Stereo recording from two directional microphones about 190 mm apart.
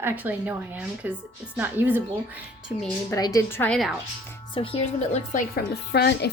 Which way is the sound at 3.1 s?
15° left (ahead or behind).